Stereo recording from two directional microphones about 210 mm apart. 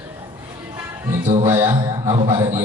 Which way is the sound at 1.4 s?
10° right (ahead or behind).